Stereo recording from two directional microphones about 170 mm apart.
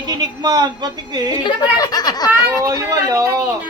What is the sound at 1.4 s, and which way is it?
Speech, 25° left (ahead or behind).